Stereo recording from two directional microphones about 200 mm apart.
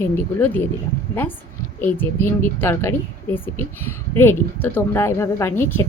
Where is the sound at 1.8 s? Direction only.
10° left (ahead or behind).